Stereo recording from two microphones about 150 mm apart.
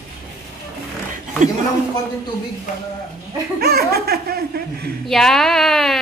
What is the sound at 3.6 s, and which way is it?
Speech, 90° right.